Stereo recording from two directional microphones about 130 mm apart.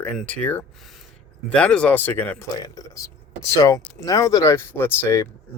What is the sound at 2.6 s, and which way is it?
Speech, 30° left (ahead or behind).